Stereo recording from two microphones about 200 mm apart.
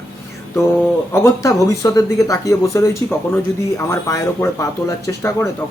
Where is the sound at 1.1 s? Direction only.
15° left (ahead or behind).